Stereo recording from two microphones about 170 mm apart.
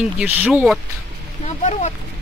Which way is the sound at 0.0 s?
10° right (ahead or behind).